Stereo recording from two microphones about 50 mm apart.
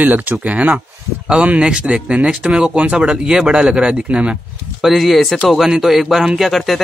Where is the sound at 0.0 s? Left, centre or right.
Right.